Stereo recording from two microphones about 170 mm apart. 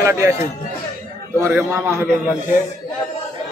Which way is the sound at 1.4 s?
15° right (ahead or behind).